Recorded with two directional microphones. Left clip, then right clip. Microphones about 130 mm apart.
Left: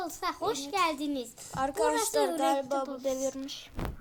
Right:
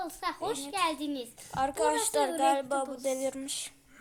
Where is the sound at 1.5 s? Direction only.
5° right (ahead or behind).